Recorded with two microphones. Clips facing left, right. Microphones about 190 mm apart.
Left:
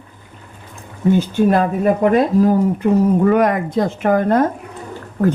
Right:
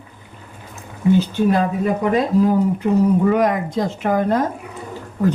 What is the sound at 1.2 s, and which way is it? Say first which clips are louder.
A woman's voice: left 2 dB; 55° left (ahead or behind).